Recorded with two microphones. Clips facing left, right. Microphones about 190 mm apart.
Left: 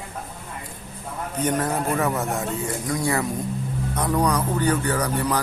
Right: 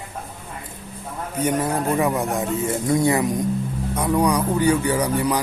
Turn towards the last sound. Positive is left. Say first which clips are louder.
# right 3 dB
turn(degrees=-10)  # may be behind; listen again after turning